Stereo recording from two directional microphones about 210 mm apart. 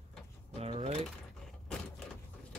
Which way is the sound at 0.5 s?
30° right (ahead or behind).